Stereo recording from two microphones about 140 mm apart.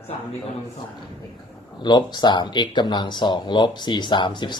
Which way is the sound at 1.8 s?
30° left (ahead or behind).